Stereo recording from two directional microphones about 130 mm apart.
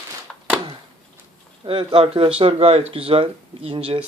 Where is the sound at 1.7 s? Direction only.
45° right (ahead or behind).